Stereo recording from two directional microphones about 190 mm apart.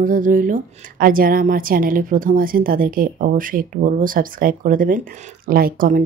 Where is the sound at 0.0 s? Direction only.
45° right (ahead or behind).